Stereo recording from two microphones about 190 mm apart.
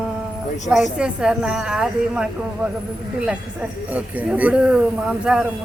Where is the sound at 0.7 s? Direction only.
5° right (ahead or behind).